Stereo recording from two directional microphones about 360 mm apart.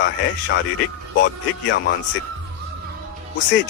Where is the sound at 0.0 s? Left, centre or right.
Left.